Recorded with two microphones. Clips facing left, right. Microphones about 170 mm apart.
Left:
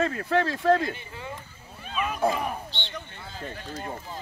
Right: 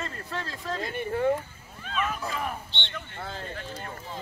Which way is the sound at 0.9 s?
55° right (ahead or behind).